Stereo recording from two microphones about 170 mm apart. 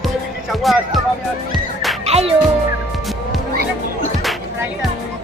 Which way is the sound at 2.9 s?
Centre (ahead or behind).